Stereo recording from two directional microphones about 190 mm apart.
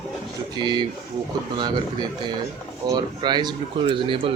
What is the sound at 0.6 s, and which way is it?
Speech, 25° right (ahead or behind).